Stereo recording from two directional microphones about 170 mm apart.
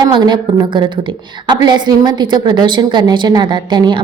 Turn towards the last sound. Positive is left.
turn(degrees=-25)  # may be behind; listen again after turning